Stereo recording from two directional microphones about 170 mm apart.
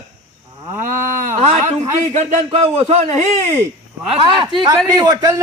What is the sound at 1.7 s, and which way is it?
A man's voice, 40° right (ahead or behind).